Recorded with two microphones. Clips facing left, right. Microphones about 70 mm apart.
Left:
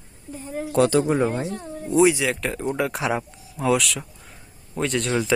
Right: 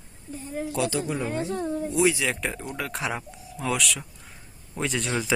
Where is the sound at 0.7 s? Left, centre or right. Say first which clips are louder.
Left 10 dB; left.